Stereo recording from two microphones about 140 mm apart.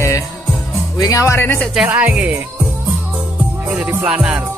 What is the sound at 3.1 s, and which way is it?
Music, 10° right (ahead or behind).